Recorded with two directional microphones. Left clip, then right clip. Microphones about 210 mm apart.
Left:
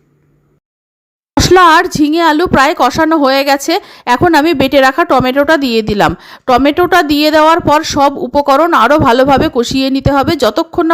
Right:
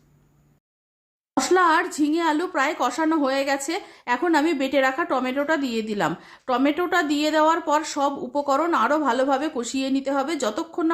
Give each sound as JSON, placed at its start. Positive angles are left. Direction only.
{"t": 1.3, "sound": "a woman's voice", "side_deg": 40}